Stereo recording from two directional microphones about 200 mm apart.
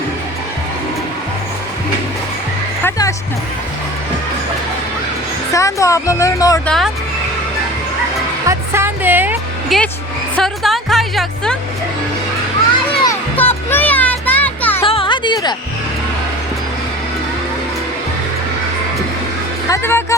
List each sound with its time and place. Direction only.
2.8 s a woman's voice: 15° left (ahead or behind)
5.5 s speech: 15° left (ahead or behind)
6.7 s speech: centre (ahead or behind)
8.4 s music: 10° right (ahead or behind)
12.9 s music: 25° left (ahead or behind)
13.3 s music: 10° left (ahead or behind)
14.8 s music: 25° left (ahead or behind)
19.6 s speech: 15° left (ahead or behind)